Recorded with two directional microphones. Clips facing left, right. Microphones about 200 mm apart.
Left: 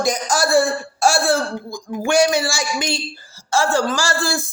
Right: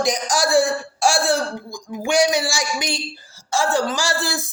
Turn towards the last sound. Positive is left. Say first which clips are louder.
# left 2 dB
turn(degrees=-20)  # may be behind; listen again after turning